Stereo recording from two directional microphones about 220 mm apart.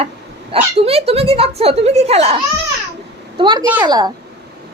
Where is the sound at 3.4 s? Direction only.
20° right (ahead or behind).